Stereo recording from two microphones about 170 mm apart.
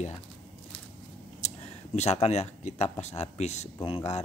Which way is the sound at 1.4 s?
40° left (ahead or behind).